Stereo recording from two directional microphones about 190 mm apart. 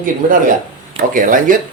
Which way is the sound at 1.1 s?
45° right (ahead or behind).